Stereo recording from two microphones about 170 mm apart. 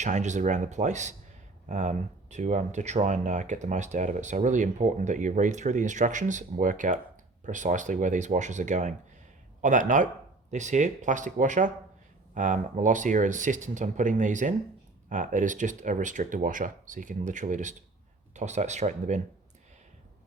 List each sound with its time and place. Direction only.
0.0 s speech: 45° right (ahead or behind)